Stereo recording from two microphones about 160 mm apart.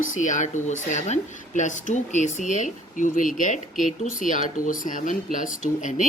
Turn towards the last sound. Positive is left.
turn(degrees=50)  # may be behind; listen again after turning